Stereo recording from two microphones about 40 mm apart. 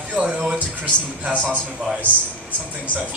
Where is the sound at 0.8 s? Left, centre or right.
Right.